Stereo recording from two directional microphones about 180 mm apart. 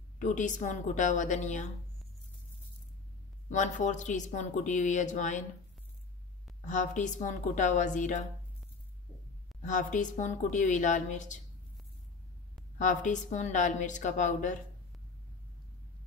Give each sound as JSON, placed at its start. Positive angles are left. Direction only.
{"t": 0.2, "sound": "speech", "side_deg": 45}
{"t": 3.4, "sound": "speech", "side_deg": 45}
{"t": 6.6, "sound": "speech", "side_deg": 45}
{"t": 9.6, "sound": "speech", "side_deg": 45}
{"t": 12.7, "sound": "speech", "side_deg": 45}